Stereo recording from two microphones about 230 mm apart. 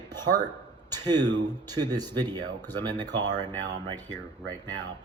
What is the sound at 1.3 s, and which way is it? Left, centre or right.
Speech, centre.